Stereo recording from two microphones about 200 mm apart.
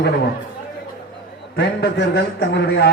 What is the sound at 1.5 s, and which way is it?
A man's voice, 55° left (ahead or behind).